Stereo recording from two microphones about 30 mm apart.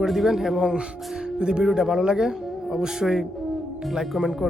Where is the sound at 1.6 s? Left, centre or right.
Right.